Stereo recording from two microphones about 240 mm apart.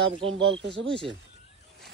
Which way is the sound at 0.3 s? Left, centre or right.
Right.